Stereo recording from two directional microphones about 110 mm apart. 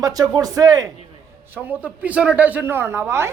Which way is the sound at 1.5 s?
15° right (ahead or behind).